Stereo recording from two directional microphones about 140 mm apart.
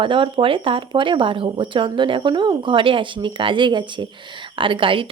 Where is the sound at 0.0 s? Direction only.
40° right (ahead or behind).